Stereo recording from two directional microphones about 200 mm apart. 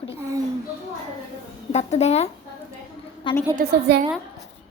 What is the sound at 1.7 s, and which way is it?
A woman's voice, 35° left (ahead or behind).